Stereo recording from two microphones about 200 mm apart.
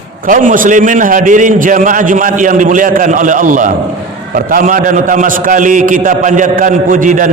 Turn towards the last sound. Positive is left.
turn(degrees=-40)  # may be behind; listen again after turning